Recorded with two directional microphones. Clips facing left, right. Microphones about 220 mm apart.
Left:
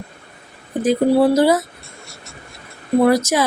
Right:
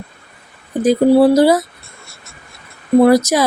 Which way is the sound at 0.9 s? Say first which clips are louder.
Right 4 dB; 35° right (ahead or behind).